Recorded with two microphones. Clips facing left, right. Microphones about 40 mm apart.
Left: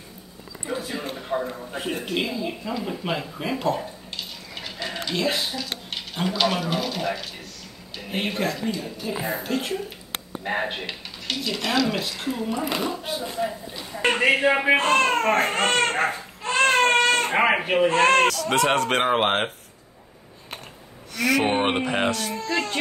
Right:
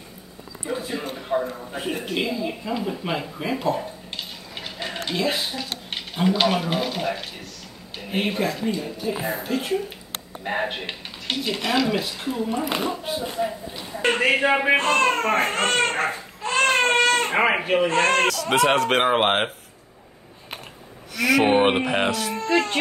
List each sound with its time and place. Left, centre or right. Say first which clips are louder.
0.7 s a man's voice: right 1 dB; centre
5.1 s speech: even; centre
6.2 s speech: right 3 dB; centre
8.0 s speech: right 2 dB; centre
11.3 s speech: right 2 dB; right
11.6 s speech: right 1 dB; centre
12.4 s speech: right 1 dB; centre
12.9 s speech: right 2 dB; centre
21.2 s speech: right 2 dB; centre
21.5 s speech: right 4 dB; centre
22.3 s speech: right 4 dB; right